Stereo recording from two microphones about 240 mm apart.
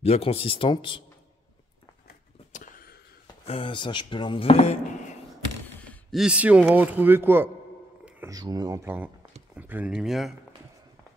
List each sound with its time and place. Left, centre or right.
0.0 s speech: left
2.0 s a sound: left
3.4 s speech: left
5.9 s a man's voice: centre